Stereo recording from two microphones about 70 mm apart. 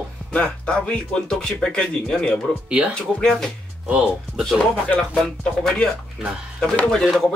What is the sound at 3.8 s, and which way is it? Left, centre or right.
Speech, centre.